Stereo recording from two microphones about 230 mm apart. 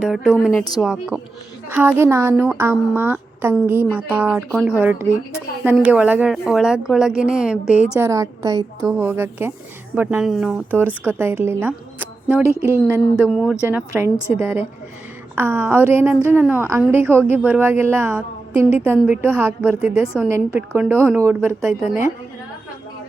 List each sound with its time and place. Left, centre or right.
0.0 s a woman's voice: centre
0.5 s speech: centre
0.8 s a woman's voice: centre